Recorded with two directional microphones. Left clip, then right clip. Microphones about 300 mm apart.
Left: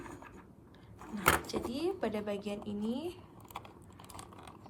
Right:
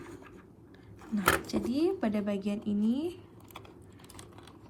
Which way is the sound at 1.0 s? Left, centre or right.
Centre.